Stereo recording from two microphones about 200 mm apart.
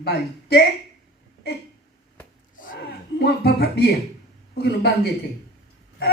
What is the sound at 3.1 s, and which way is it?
Speech, 55° left (ahead or behind).